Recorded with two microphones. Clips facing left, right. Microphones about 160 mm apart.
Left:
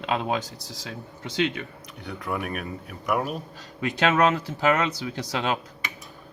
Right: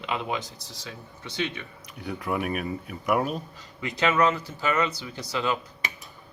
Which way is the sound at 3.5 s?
80° left.